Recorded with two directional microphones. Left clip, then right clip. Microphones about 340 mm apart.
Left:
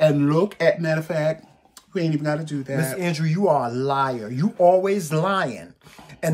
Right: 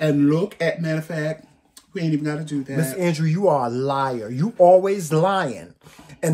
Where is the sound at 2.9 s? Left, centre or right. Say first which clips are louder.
Right 2 dB; centre.